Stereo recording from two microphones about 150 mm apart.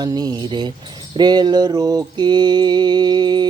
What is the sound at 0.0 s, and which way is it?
Speech, 25° right (ahead or behind).